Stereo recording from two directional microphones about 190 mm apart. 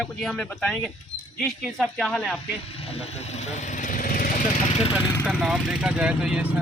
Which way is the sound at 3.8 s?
45° left (ahead or behind).